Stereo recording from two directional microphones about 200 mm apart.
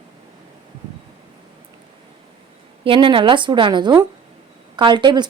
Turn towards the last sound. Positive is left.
turn(degrees=-20)  # may be behind; listen again after turning